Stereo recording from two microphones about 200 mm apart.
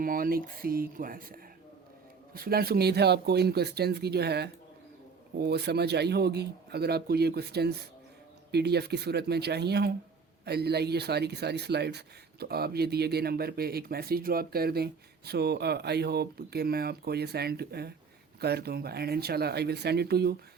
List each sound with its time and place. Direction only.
0.0 s speech: 45° right (ahead or behind)